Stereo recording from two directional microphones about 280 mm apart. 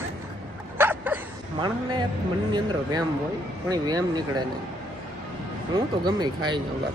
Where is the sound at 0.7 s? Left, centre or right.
Centre.